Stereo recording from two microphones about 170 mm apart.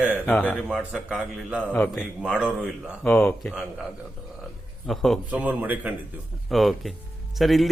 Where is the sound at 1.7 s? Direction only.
10° left (ahead or behind).